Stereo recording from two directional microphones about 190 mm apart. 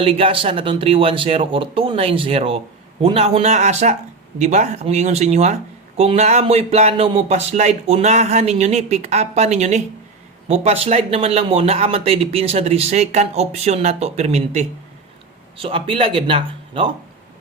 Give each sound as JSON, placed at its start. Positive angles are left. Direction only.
{"t": 0.0, "sound": "speech", "side_deg": -30}